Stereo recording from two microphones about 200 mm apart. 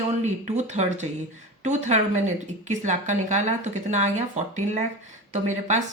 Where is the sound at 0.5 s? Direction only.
35° right (ahead or behind).